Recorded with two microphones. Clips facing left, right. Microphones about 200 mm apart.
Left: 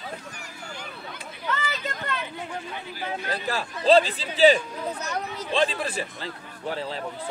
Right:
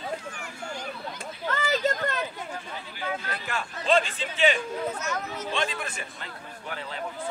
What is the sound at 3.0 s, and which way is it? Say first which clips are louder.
A man's voice: left 2 dB; 35° left (ahead or behind).